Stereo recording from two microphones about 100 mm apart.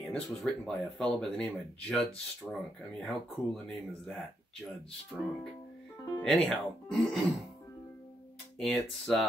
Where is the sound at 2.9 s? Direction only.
5° left (ahead or behind).